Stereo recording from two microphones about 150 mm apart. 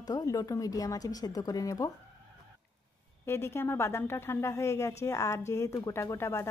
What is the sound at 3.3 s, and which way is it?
Speech, 15° left (ahead or behind).